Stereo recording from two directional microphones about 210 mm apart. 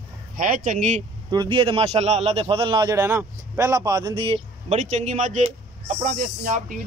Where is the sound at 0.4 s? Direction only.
35° right (ahead or behind).